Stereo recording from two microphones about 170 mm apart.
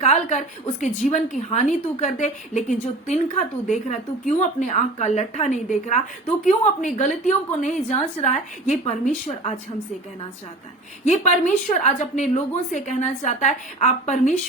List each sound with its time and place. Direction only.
0.0 s a woman's voice: 45° left (ahead or behind)
11.0 s a woman's voice: 45° left (ahead or behind)